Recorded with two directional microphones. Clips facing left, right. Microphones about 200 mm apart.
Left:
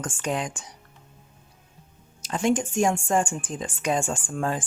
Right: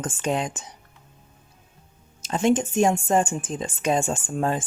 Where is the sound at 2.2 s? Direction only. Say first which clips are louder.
Right 3 dB; 25° right (ahead or behind).